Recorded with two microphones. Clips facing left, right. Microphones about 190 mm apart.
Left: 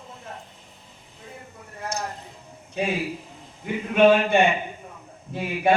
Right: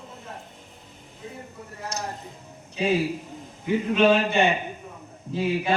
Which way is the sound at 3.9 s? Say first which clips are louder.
Left 4 dB; 55° left (ahead or behind).